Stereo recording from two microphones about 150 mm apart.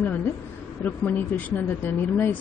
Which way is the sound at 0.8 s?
10° left (ahead or behind).